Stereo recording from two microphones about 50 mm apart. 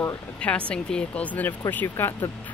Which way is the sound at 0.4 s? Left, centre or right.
Left.